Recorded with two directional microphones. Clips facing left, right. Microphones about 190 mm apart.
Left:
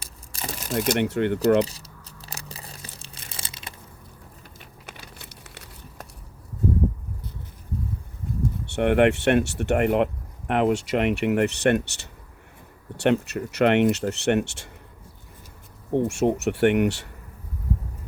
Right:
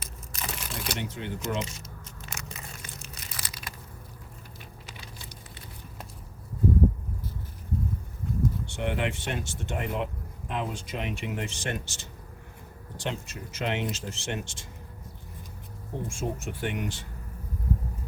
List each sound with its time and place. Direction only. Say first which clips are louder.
0.0 s a sound: left 2 dB; 35° left (ahead or behind)
0.9 s speech: left 12 dB; 65° left (ahead or behind)
1.6 s tearing: even; 35° left (ahead or behind)
4.9 s a sound: left 5 dB; 65° left (ahead or behind)
8.6 s speech: left 11 dB; 65° left (ahead or behind)
15.9 s speech: left 12 dB; 70° left (ahead or behind)